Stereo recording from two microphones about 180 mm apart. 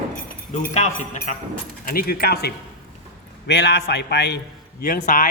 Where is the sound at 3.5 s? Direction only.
70° left (ahead or behind).